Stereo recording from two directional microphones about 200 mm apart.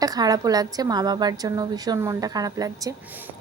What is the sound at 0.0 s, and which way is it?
A woman's voice, 20° right (ahead or behind).